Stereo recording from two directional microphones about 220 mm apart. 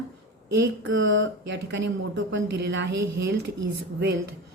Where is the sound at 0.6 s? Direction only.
60° right (ahead or behind).